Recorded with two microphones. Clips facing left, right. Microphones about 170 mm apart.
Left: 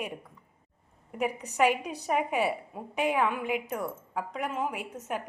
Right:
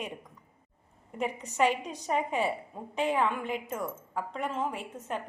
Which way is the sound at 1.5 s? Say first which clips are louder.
Left 1 dB; 10° left (ahead or behind).